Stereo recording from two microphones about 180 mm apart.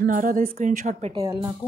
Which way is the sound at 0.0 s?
50° right (ahead or behind).